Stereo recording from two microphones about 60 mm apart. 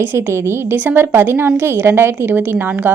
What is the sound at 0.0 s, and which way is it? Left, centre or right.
A woman's voice, right.